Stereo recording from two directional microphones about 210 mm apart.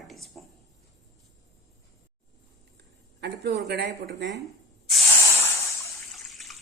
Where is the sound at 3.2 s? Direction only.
50° right (ahead or behind).